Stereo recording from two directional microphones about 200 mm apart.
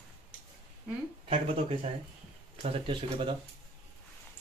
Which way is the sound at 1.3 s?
30° right (ahead or behind).